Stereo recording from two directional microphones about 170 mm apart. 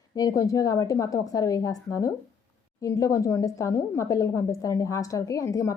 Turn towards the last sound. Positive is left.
turn(degrees=20)  # may be behind; listen again after turning